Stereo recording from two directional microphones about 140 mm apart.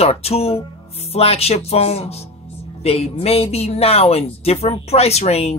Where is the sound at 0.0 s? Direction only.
45° left (ahead or behind).